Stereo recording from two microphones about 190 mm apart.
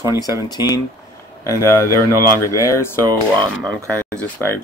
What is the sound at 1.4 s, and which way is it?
Speech, 15° left (ahead or behind).